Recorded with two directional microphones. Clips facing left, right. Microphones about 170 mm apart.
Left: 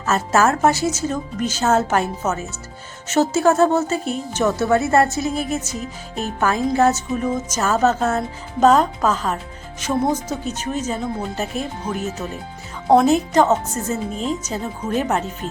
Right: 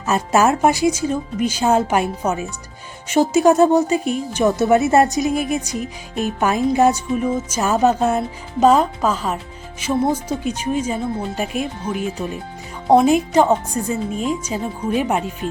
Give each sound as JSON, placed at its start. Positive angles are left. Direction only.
{"t": 0.0, "sound": "speech", "side_deg": -15}